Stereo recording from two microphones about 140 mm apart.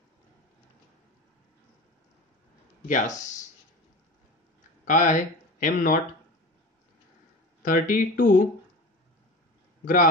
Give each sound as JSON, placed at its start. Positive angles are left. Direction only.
{"t": 2.9, "sound": "speech", "side_deg": 65}
{"t": 4.8, "sound": "speech", "side_deg": 70}
{"t": 7.6, "sound": "speech", "side_deg": 70}